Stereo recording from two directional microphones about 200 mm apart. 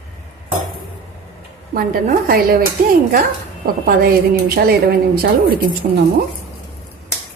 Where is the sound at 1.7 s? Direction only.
45° right (ahead or behind).